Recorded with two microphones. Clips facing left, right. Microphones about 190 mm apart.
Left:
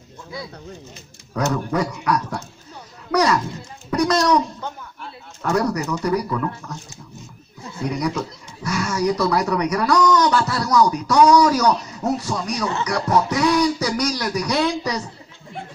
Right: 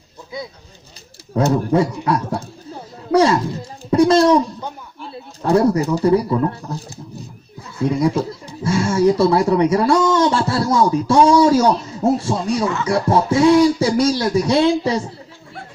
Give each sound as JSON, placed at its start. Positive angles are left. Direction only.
{"t": 1.3, "sound": "a sound", "side_deg": -30}
{"t": 3.9, "sound": "babbling", "side_deg": -30}
{"t": 5.4, "sound": "speech", "side_deg": -30}